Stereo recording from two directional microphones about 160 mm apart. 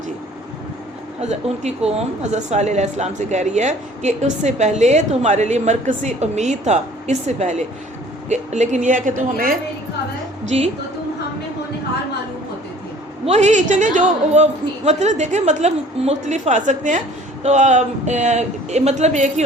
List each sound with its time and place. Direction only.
1.2 s a woman's voice: 45° right (ahead or behind)
13.2 s a woman's voice: 45° right (ahead or behind)